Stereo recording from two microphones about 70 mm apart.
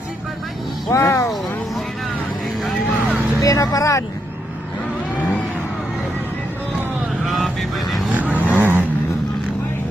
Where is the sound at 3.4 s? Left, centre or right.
Left.